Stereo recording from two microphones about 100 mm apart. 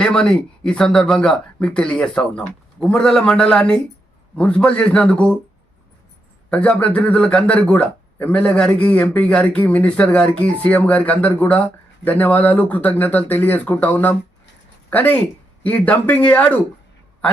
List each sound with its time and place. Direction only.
0.0 s speech: 10° left (ahead or behind)
6.5 s speech: 10° left (ahead or behind)